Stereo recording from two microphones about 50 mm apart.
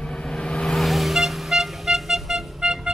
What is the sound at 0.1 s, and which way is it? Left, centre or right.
Vehicle, centre.